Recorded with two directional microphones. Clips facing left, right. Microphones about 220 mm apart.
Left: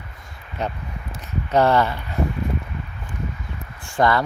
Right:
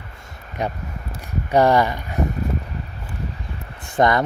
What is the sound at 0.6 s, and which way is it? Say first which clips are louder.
Speech: right 2 dB; 15° right (ahead or behind).